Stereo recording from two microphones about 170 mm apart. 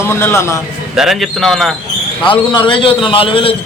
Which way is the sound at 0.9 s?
Centre (ahead or behind).